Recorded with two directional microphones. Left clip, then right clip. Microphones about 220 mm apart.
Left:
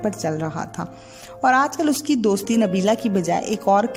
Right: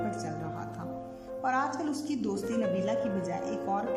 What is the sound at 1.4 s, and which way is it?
Speech, 50° left (ahead or behind).